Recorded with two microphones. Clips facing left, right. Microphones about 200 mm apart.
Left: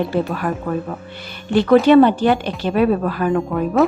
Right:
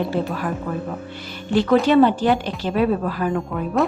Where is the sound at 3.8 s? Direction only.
Centre (ahead or behind).